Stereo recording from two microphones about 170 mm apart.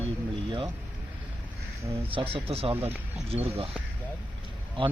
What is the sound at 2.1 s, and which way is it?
Speech, 30° right (ahead or behind).